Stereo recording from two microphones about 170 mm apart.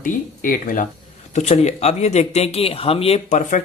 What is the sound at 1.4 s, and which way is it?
Speech, 40° left (ahead or behind).